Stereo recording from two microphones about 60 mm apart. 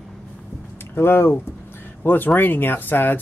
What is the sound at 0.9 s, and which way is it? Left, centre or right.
Speech, left.